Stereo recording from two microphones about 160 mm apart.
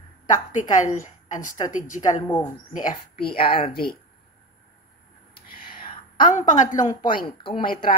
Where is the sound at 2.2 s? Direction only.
25° left (ahead or behind).